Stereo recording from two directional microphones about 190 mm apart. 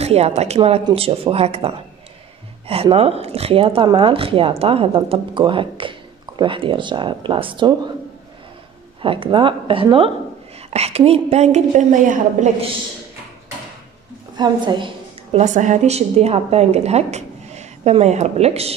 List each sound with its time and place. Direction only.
0.0 s a woman's voice: 35° right (ahead or behind)
9.0 s a woman's voice: 30° right (ahead or behind)
14.3 s a woman's voice: 25° right (ahead or behind)
15.3 s a woman's voice: 40° right (ahead or behind)